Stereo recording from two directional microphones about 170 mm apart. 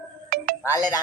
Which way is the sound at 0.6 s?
20° left (ahead or behind).